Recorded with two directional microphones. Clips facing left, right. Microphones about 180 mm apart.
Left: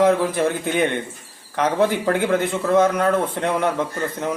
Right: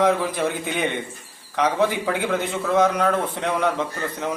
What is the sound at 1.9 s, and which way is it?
Speech, 55° left (ahead or behind).